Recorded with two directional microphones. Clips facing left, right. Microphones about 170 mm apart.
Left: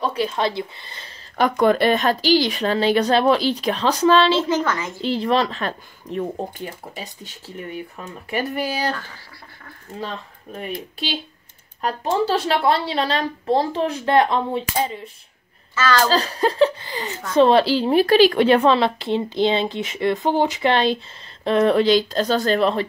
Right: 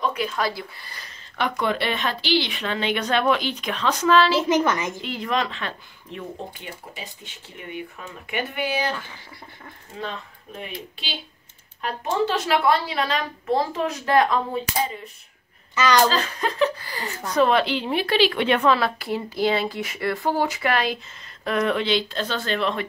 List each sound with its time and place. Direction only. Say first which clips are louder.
0.0 s speech: left 3 dB; 30° left (ahead or behind)
1.4 s speech: left 8 dB; 45° left (ahead or behind); by 4.5 s 25° left (ahead or behind)
4.5 s a woman's voice: right 1 dB; 20° right (ahead or behind)
5.0 s speech: left 10 dB; 30° left (ahead or behind)
10.6 s speech: left 7 dB; 45° left (ahead or behind)
11.8 s speech: left 3 dB; 35° left (ahead or behind)
15.7 s a child's voice: even; 20° right (ahead or behind)
16.1 s speech: left 5 dB; 35° left (ahead or behind)